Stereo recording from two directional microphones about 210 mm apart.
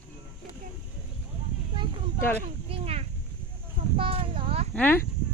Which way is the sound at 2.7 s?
30° right (ahead or behind).